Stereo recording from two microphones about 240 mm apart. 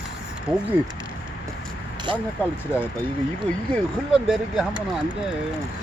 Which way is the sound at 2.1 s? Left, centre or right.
Right.